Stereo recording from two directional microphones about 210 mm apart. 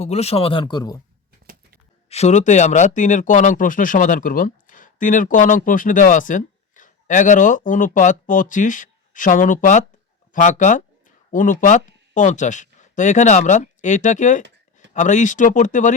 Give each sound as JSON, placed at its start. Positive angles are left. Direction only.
{"t": 0.0, "sound": "speech", "side_deg": 30}
{"t": 2.0, "sound": "speech", "side_deg": 30}